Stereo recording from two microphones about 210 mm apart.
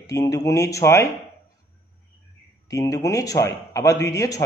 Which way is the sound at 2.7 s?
15° left (ahead or behind).